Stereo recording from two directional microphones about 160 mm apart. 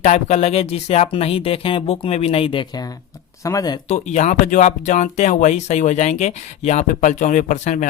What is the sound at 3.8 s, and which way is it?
Speech, 45° left (ahead or behind).